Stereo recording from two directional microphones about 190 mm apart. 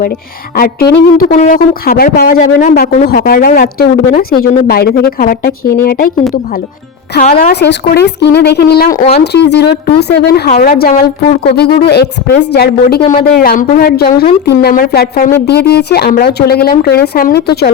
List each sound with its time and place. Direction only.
0.5 s a woman's voice: 55° left (ahead or behind)
1.3 s speech: 45° left (ahead or behind)
7.3 s a woman's voice: 50° left (ahead or behind)